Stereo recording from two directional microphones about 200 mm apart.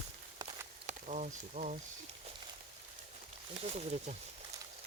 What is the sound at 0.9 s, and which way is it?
Speech, 35° right (ahead or behind).